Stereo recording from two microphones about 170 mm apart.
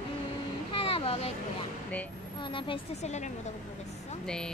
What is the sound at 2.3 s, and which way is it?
A woman's voice, 30° left (ahead or behind).